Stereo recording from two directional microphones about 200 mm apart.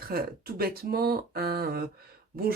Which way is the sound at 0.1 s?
50° right (ahead or behind).